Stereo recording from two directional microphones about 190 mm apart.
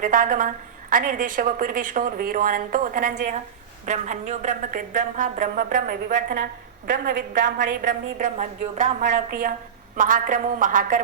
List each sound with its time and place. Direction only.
0.0 s a woman's voice: 45° right (ahead or behind)